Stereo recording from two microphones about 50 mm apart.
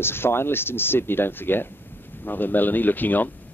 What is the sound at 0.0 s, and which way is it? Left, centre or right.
Speech, left.